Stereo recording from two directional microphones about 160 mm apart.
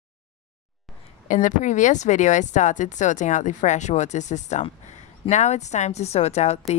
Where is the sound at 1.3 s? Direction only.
55° left (ahead or behind).